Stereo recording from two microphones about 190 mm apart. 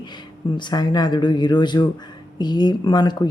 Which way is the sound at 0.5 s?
20° left (ahead or behind).